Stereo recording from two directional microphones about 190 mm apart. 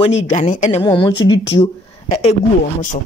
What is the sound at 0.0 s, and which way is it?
Speech, 35° left (ahead or behind).